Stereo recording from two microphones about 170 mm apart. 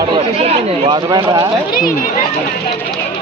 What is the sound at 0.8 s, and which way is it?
Speech, 30° right (ahead or behind).